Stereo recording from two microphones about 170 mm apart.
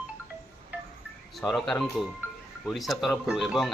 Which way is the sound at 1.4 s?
Centre (ahead or behind).